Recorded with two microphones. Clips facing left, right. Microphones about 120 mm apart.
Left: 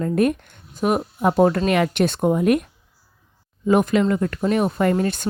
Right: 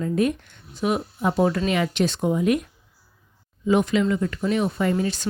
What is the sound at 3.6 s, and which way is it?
Speech, 50° left (ahead or behind).